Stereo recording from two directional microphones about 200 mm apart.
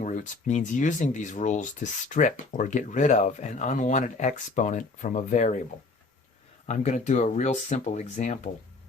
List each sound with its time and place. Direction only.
0.0 s speech: 40° left (ahead or behind)
6.7 s speech: 35° left (ahead or behind)